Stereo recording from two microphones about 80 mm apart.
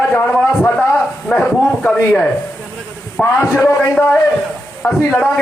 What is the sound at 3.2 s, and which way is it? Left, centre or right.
Speech, left.